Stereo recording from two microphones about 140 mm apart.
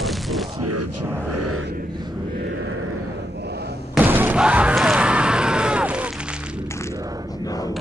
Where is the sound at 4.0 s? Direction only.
15° right (ahead or behind).